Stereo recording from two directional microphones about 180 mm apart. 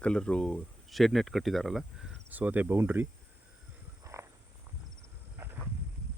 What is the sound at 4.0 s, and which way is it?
Frog, 15° right (ahead or behind).